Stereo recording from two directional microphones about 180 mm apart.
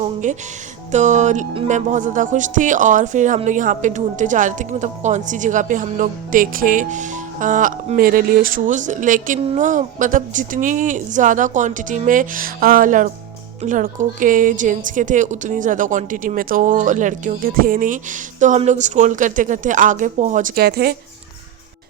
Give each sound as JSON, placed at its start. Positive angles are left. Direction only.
{"t": 0.0, "sound": "music", "side_deg": -45}
{"t": 0.9, "sound": "speech", "side_deg": -40}